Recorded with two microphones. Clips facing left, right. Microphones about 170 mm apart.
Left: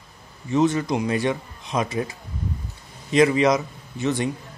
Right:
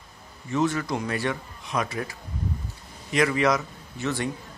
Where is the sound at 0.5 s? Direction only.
20° left (ahead or behind).